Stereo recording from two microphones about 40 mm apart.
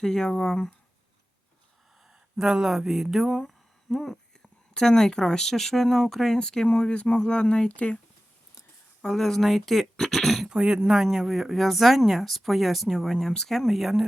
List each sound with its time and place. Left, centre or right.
0.0 s speech: centre
2.3 s speech: centre
6.7 s speech: left
9.0 s speech: centre
10.4 s speech: centre